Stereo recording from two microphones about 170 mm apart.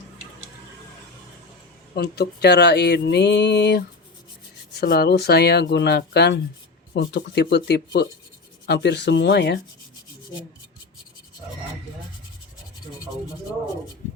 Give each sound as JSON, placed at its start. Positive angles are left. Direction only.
{"t": 2.0, "sound": "speech", "side_deg": 75}
{"t": 4.8, "sound": "speech", "side_deg": 70}
{"t": 8.6, "sound": "rub", "side_deg": 85}